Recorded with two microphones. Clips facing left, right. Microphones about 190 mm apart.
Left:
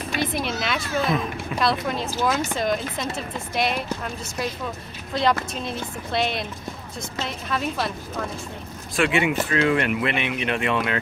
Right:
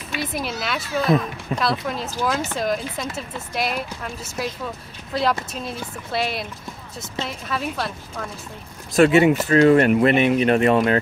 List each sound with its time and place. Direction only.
0.1 s a woman's voice: 5° right (ahead or behind)
8.9 s speech: 40° right (ahead or behind)